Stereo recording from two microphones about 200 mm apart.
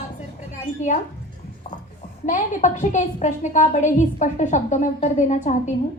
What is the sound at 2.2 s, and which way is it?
A woman's voice, 40° left (ahead or behind).